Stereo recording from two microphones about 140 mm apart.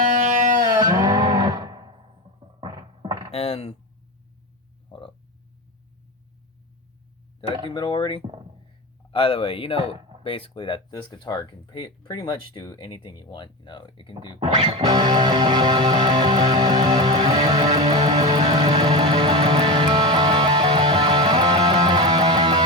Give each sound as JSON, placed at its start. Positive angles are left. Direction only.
{"t": 0.2, "sound": "music", "side_deg": -65}
{"t": 0.6, "sound": "music", "side_deg": -25}
{"t": 3.3, "sound": "speech", "side_deg": 45}
{"t": 4.9, "sound": "frog", "side_deg": 35}
{"t": 7.7, "sound": "speech", "side_deg": 35}
{"t": 14.3, "sound": "speech", "side_deg": -45}
{"t": 14.8, "sound": "music", "side_deg": -30}